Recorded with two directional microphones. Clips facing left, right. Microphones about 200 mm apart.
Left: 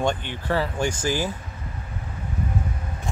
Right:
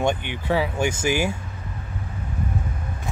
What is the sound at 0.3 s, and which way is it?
Speech, 10° right (ahead or behind).